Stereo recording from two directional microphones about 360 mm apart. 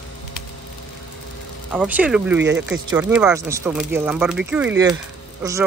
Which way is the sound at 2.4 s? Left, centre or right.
Right.